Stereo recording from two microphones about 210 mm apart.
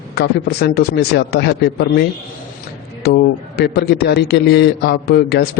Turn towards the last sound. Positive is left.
turn(degrees=50)  # may be behind; listen again after turning